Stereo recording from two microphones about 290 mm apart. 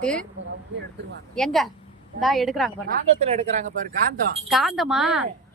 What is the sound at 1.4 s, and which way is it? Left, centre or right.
Speech, centre.